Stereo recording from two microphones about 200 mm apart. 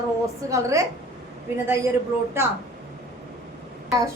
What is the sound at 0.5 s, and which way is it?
Speech, 15° right (ahead or behind).